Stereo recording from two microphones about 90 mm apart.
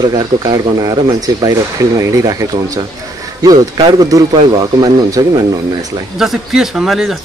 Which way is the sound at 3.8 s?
60° right (ahead or behind).